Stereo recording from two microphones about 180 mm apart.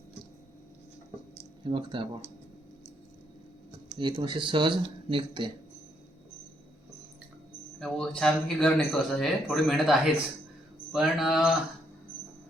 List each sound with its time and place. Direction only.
1.6 s speech: 30° right (ahead or behind)
3.9 s speech: 25° right (ahead or behind)
7.8 s a man's voice: 5° left (ahead or behind)